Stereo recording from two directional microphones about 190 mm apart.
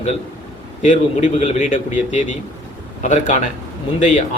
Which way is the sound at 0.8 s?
40° left (ahead or behind).